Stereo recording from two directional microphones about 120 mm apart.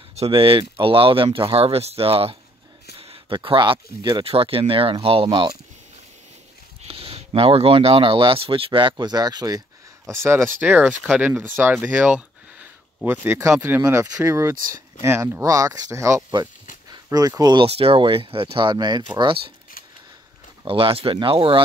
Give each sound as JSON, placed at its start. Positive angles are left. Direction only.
{"t": 0.1, "sound": "speech", "side_deg": -55}
{"t": 3.0, "sound": "a sound", "side_deg": -50}
{"t": 3.3, "sound": "speech", "side_deg": -40}
{"t": 6.9, "sound": "speech", "side_deg": -55}
{"t": 10.0, "sound": "speech", "side_deg": -20}
{"t": 16.9, "sound": "a sound", "side_deg": -35}
{"t": 17.4, "sound": "speech", "side_deg": -35}
{"t": 17.6, "sound": "speech", "side_deg": -50}
{"t": 20.6, "sound": "speech", "side_deg": -50}